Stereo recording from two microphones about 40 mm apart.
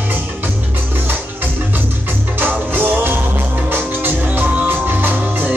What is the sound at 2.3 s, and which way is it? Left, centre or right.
Music, right.